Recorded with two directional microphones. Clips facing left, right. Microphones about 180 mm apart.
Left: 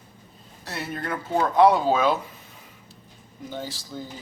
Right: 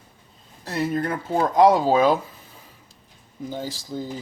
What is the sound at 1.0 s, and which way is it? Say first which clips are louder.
Speech: right 2 dB; 35° right (ahead or behind).